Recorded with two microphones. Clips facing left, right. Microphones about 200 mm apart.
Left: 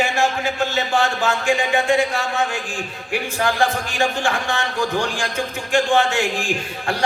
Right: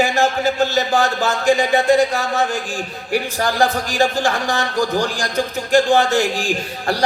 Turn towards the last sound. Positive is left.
turn(degrees=-40)  # may be behind; listen again after turning